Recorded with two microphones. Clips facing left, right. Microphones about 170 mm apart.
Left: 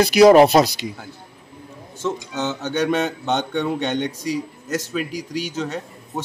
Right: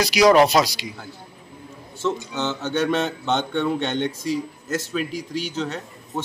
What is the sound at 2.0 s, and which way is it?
Speech, 10° left (ahead or behind).